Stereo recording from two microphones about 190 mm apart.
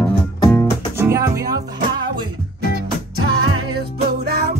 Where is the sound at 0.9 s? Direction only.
15° right (ahead or behind).